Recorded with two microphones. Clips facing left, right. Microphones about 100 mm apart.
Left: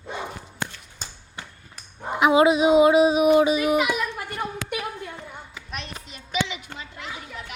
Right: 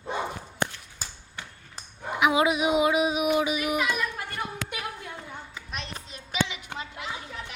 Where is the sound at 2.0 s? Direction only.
30° left (ahead or behind).